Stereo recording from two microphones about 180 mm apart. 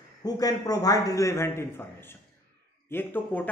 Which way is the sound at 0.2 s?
20° left (ahead or behind).